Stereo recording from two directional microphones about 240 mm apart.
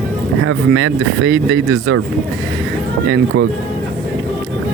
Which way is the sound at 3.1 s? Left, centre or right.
Right.